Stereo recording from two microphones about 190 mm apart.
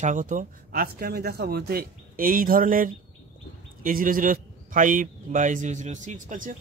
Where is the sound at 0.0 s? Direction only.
45° right (ahead or behind).